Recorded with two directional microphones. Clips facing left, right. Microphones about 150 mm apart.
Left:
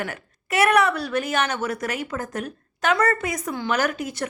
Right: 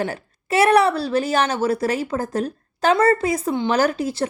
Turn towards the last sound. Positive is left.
turn(degrees=-30)  # may be behind; listen again after turning